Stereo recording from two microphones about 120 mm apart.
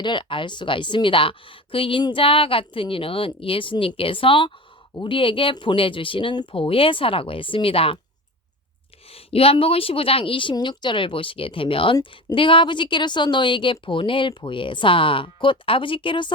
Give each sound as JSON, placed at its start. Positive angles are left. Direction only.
{"t": 0.0, "sound": "a woman's voice", "side_deg": 40}
{"t": 9.1, "sound": "a woman's voice", "side_deg": 55}